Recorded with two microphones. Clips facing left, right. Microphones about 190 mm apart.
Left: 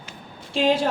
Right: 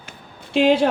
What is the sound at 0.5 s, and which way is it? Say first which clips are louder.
Speech: right 5 dB; 60° right (ahead or behind).